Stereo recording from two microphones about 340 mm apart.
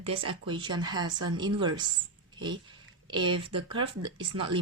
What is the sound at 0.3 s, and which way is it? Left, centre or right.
Speech, centre.